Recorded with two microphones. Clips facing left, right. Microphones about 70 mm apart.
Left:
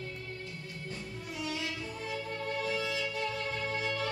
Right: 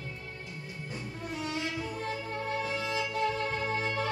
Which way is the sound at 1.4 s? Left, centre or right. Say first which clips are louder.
Right 2 dB; right.